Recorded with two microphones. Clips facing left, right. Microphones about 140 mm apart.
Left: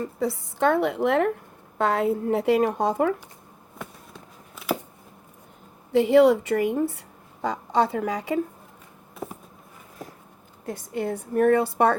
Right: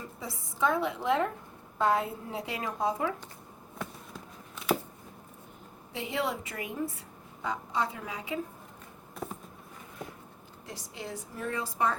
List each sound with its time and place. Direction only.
0.0 s speech: 65° left (ahead or behind)
3.8 s a sound: centre (ahead or behind)
5.9 s speech: 70° left (ahead or behind)
9.1 s walk: centre (ahead or behind)
10.7 s a woman's voice: 55° left (ahead or behind)